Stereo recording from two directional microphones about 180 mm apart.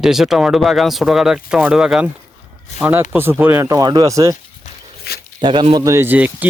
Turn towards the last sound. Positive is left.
turn(degrees=-10)  # may be behind; listen again after turning